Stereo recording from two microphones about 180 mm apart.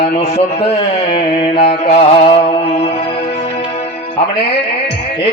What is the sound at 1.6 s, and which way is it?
Music, 60° left (ahead or behind).